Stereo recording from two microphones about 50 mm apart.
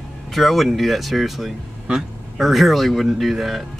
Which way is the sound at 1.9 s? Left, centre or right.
Centre.